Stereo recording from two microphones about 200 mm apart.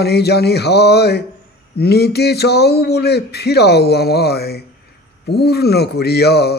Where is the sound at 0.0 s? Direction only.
55° left (ahead or behind).